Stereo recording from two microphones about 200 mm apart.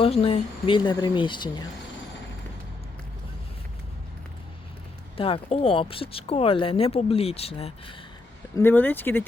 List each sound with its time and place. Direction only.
0.0 s speech: 30° left (ahead or behind)
5.1 s speech: 25° left (ahead or behind)
8.5 s speech: 10° left (ahead or behind)